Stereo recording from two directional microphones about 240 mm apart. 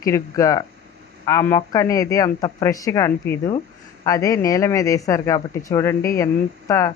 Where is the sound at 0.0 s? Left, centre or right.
Centre.